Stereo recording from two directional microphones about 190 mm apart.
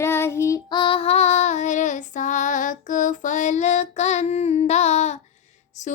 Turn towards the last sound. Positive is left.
turn(degrees=40)  # may be behind; listen again after turning